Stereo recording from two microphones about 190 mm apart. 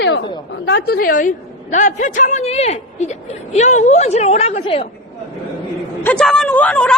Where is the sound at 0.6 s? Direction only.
60° left (ahead or behind); by 4.8 s 30° left (ahead or behind).